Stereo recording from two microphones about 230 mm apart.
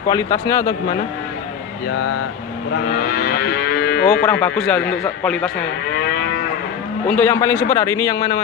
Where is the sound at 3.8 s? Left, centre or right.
Left.